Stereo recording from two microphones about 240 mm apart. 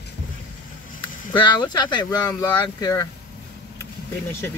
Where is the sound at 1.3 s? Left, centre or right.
Centre.